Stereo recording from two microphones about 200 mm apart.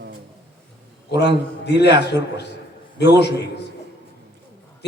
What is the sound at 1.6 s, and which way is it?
A man's voice, 60° left (ahead or behind).